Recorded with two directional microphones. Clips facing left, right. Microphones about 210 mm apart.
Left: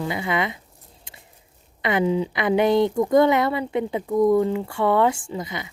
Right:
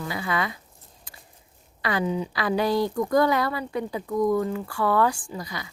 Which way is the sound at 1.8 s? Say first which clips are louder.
Left 5 dB; 20° left (ahead or behind).